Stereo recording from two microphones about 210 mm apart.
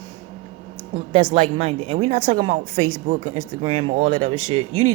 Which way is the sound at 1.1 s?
25° right (ahead or behind).